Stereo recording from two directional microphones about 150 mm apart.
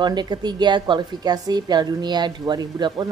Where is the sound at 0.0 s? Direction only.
30° right (ahead or behind).